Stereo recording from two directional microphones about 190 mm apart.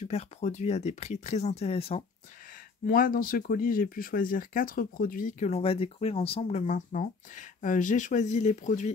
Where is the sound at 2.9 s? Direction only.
50° left (ahead or behind).